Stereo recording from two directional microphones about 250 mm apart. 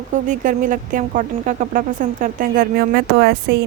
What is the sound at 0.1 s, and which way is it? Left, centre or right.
Speech, right.